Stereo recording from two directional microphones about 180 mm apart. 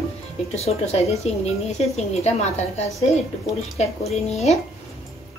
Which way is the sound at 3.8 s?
35° left (ahead or behind).